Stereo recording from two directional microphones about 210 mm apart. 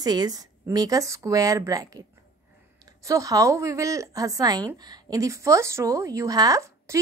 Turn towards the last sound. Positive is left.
turn(degrees=-15)  # may be behind; listen again after turning